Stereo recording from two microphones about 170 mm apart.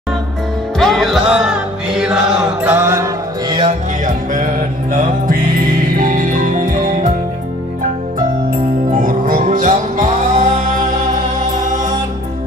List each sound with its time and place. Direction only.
0.7 s music: centre (ahead or behind); by 3.1 s 15° right (ahead or behind)
3.4 s music: 30° right (ahead or behind)
4.0 s music: 50° right (ahead or behind)
8.9 s music: 55° right (ahead or behind)